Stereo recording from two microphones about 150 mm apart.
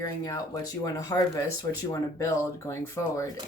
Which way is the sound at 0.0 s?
20° left (ahead or behind).